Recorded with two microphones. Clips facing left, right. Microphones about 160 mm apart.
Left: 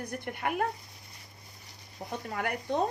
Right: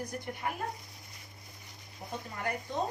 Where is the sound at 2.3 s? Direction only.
70° left (ahead or behind).